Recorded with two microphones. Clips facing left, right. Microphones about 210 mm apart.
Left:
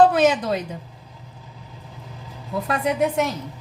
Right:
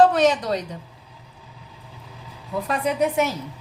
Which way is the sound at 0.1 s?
5° left (ahead or behind).